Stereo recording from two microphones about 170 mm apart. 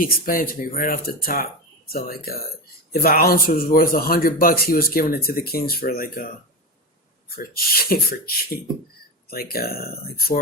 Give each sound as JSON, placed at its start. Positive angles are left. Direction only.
{"t": 0.0, "sound": "a man's voice", "side_deg": 55}
{"t": 7.3, "sound": "a man's voice", "side_deg": 60}